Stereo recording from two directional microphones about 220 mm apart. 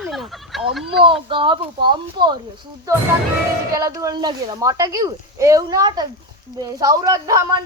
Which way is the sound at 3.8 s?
15° right (ahead or behind).